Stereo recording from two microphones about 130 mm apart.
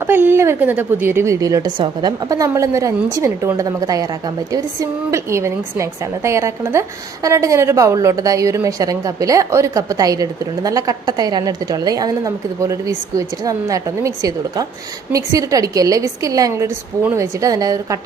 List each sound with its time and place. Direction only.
0.0 s a woman's voice: 15° right (ahead or behind)